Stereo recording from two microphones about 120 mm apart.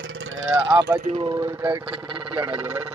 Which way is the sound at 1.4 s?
25° right (ahead or behind).